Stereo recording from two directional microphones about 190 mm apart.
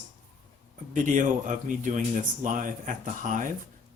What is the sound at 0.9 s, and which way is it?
A man's voice, 40° right (ahead or behind).